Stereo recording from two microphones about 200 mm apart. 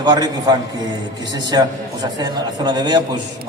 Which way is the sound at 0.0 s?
20° right (ahead or behind).